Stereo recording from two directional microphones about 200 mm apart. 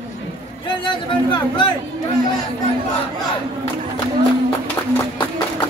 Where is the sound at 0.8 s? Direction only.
25° left (ahead or behind).